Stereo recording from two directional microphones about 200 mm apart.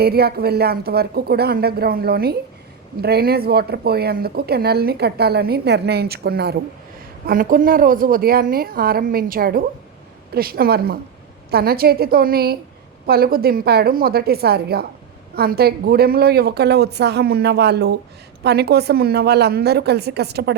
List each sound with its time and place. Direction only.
0.0 s a woman's voice: 50° right (ahead or behind)